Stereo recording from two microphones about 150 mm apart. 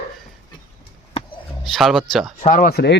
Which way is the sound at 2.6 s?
90° left.